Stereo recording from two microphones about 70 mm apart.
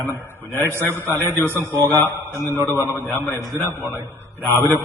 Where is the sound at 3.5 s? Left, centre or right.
Right.